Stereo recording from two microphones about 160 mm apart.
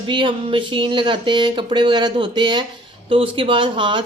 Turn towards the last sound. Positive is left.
turn(degrees=-30)  # may be behind; listen again after turning